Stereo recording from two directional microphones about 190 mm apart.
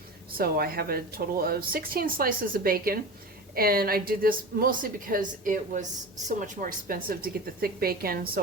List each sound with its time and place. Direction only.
0.3 s a woman's voice: 50° right (ahead or behind)